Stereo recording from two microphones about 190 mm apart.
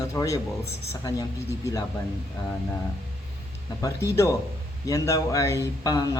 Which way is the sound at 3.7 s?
15° left (ahead or behind).